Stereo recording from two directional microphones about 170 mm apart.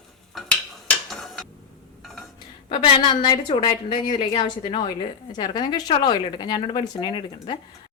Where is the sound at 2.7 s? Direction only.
25° left (ahead or behind).